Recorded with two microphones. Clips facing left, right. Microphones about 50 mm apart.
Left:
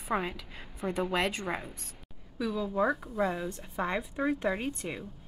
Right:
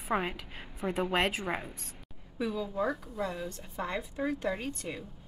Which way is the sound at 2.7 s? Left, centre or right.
Centre.